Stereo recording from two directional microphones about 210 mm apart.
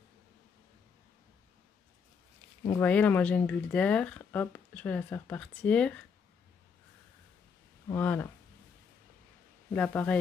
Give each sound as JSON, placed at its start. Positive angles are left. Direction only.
{"t": 2.8, "sound": "speech", "side_deg": 5}
{"t": 7.9, "sound": "speech", "side_deg": 10}
{"t": 9.7, "sound": "speech", "side_deg": 5}